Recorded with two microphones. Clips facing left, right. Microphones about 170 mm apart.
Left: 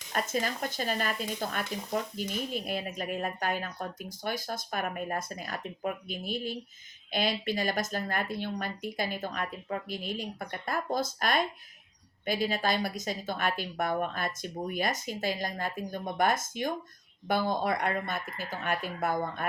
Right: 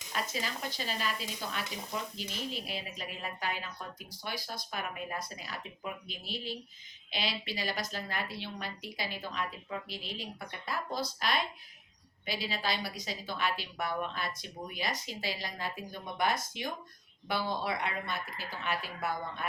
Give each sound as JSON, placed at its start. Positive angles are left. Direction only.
{"t": 0.1, "sound": "speech", "side_deg": 50}